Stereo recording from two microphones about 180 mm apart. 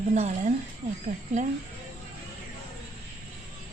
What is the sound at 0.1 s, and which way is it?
Speech, 40° right (ahead or behind).